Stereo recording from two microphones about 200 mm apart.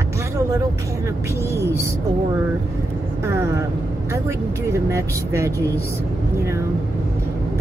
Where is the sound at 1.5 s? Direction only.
15° right (ahead or behind).